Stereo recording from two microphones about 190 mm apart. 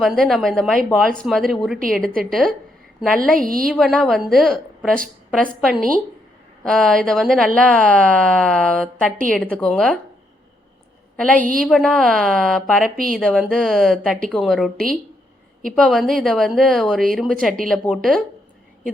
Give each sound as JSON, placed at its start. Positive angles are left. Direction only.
{"t": 0.0, "sound": "speech", "side_deg": 0}
{"t": 3.3, "sound": "a woman's voice", "side_deg": -45}
{"t": 3.6, "sound": "speech", "side_deg": 0}
{"t": 11.3, "sound": "a woman's voice", "side_deg": -45}
{"t": 11.6, "sound": "speech", "side_deg": 0}